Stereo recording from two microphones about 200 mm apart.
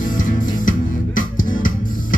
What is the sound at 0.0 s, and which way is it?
Music, 40° left (ahead or behind).